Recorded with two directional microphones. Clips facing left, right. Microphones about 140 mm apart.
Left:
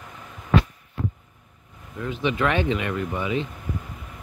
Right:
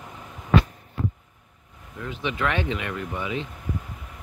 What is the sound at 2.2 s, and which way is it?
Speech, 10° left (ahead or behind).